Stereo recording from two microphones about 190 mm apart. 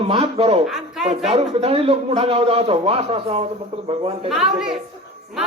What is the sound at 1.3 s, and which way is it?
A man's voice, 30° right (ahead or behind).